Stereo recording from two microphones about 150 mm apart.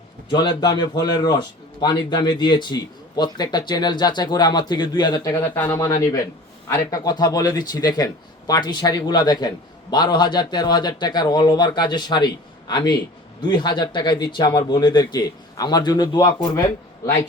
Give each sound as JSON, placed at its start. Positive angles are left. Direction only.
{"t": 0.3, "sound": "speech", "side_deg": 30}
{"t": 5.3, "sound": "speech", "side_deg": 15}